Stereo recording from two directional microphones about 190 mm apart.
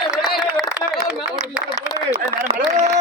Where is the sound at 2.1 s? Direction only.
40° right (ahead or behind).